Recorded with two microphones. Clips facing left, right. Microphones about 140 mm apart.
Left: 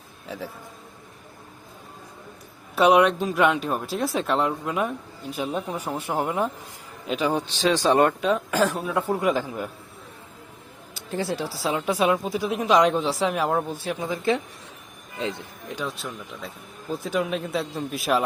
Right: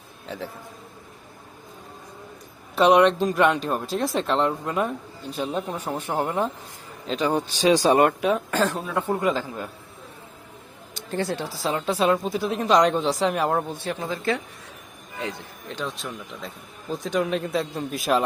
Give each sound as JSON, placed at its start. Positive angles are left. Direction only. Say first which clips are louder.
{"t": 0.3, "sound": "speech", "louder": "right 1 dB", "side_deg": 5}
{"t": 2.7, "sound": "a woman's voice", "louder": "right 1 dB", "side_deg": 5}
{"t": 7.5, "sound": "speech", "louder": "right 3 dB", "side_deg": -10}
{"t": 8.4, "sound": "a woman's voice", "louder": "left 1 dB", "side_deg": 5}
{"t": 10.9, "sound": "a woman's voice", "louder": "right 1 dB", "side_deg": 5}
{"t": 15.7, "sound": "a woman's voice", "louder": "even", "side_deg": 10}